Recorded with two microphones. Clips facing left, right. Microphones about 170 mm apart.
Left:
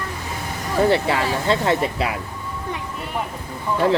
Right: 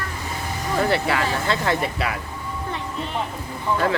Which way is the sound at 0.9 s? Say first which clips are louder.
Left 2 dB; 30° left (ahead or behind).